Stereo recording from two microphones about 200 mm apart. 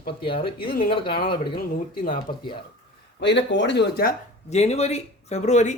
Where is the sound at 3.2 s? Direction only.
60° left (ahead or behind).